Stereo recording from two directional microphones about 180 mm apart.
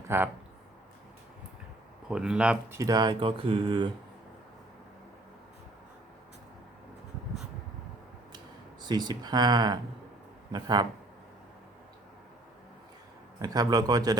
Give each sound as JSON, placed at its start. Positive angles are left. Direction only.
{"t": 0.1, "sound": "speech", "side_deg": -15}
{"t": 2.0, "sound": "speech", "side_deg": -5}
{"t": 2.7, "sound": "speech", "side_deg": -20}
{"t": 8.8, "sound": "speech", "side_deg": -25}
{"t": 13.4, "sound": "speech", "side_deg": -20}